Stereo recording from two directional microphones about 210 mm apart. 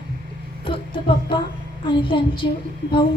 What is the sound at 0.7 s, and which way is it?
A woman's voice, 25° left (ahead or behind).